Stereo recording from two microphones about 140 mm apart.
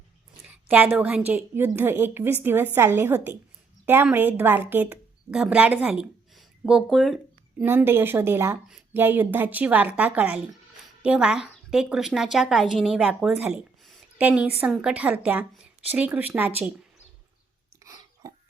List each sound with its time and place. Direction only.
0.4 s a woman's voice: 10° right (ahead or behind)
7.6 s a woman's voice: 15° right (ahead or behind)
17.8 s a sound: 25° right (ahead or behind)